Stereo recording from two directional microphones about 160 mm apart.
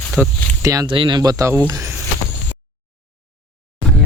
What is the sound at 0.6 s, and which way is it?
Speech, 25° right (ahead or behind).